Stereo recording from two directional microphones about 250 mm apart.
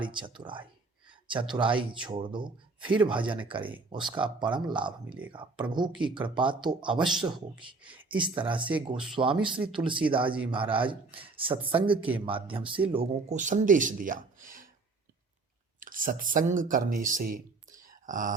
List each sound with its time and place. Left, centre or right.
0.1 s a man's voice: centre
3.6 s speech: centre
4.0 s a man's voice: centre
11.9 s speech: centre
12.2 s a man's voice: right
15.8 s speech: right